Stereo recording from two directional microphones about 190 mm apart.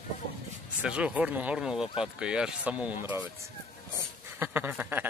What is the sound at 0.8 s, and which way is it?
Speech, 5° right (ahead or behind).